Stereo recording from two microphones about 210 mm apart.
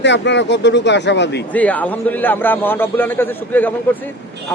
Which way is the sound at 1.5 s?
5° left (ahead or behind).